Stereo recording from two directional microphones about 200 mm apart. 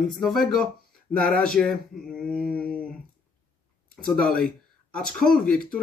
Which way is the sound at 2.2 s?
5° left (ahead or behind).